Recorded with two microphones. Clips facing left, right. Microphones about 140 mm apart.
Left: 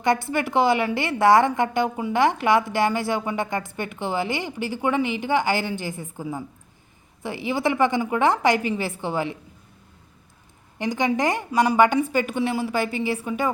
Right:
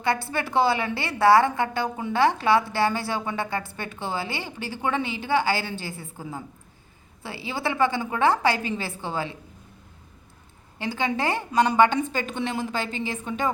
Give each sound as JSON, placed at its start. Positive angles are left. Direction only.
{"t": 0.0, "sound": "a woman's voice", "side_deg": 15}
{"t": 7.2, "sound": "a woman's voice", "side_deg": 15}
{"t": 10.8, "sound": "a woman's voice", "side_deg": 15}